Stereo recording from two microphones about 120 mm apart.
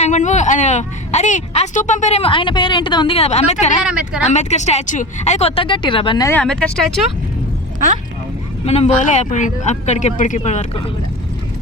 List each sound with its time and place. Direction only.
0.0 s speech: 85° left; by 2.3 s 65° left (ahead or behind)
2.3 s a woman's voice: 45° left (ahead or behind)
3.2 s a woman's voice: 65° left (ahead or behind)
3.8 s speech: 5° right (ahead or behind)
4.2 s speech: 70° left (ahead or behind); by 6.2 s 45° left (ahead or behind)
6.3 s speech: 10° left (ahead or behind)
8.6 s speech: 60° left (ahead or behind); by 10.7 s 75° left (ahead or behind)